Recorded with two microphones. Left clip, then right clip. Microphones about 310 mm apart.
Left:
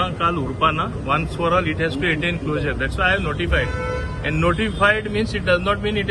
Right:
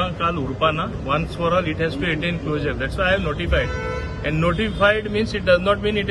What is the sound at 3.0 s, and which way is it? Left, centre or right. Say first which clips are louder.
A man's voice: even; centre.